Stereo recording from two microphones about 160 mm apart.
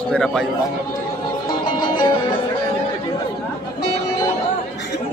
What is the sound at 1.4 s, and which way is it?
Music, 30° left (ahead or behind).